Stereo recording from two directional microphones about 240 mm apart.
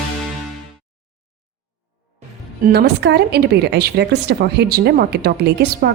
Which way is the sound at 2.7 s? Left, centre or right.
Right.